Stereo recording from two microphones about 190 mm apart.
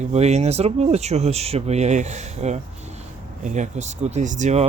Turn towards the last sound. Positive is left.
turn(degrees=-40)  # may be behind; listen again after turning